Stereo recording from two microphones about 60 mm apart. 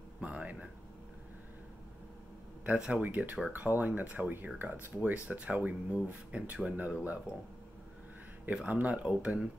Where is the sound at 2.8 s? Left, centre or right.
Centre.